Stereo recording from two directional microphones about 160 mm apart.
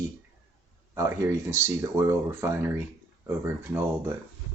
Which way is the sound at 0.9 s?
20° right (ahead or behind).